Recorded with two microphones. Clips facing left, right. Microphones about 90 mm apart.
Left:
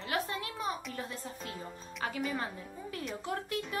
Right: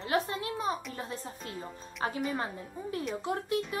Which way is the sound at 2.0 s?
30° right (ahead or behind).